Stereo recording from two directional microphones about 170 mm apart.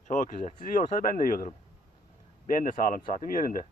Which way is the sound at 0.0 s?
45° left (ahead or behind).